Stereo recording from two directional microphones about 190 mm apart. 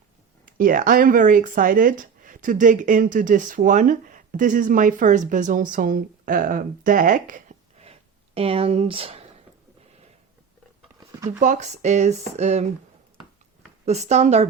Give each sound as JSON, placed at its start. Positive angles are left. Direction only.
{"t": 0.4, "sound": "speech", "side_deg": -45}
{"t": 11.3, "sound": "speech", "side_deg": -40}
{"t": 13.8, "sound": "speech", "side_deg": -35}